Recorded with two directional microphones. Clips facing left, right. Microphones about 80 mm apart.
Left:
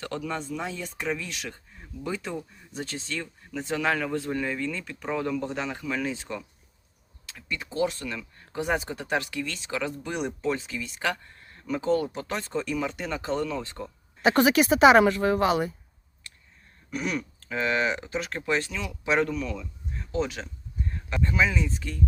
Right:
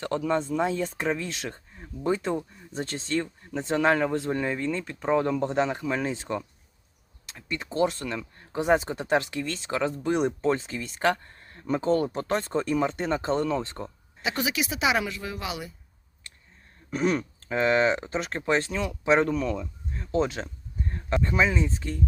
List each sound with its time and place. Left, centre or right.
0.0 s speech: right
14.2 s speech: left
16.9 s speech: right